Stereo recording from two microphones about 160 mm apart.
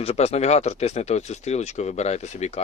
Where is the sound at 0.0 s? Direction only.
40° left (ahead or behind).